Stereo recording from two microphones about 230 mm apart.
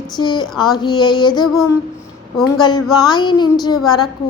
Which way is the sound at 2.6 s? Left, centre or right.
Centre.